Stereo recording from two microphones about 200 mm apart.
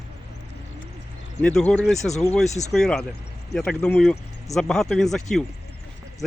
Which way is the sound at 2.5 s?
35° left (ahead or behind).